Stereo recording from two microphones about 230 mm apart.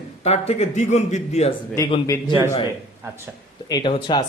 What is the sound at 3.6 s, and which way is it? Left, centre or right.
Speech, centre.